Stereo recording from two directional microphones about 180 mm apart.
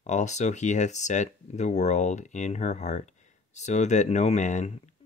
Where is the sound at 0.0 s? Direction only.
40° left (ahead or behind).